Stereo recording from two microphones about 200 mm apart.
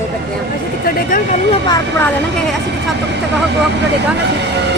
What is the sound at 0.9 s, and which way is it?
Speech, 40° left (ahead or behind).